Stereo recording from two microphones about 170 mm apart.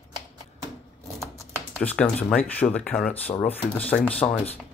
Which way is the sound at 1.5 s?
10° left (ahead or behind).